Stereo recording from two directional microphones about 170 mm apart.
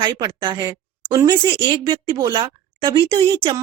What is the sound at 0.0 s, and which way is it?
Speech, 25° right (ahead or behind).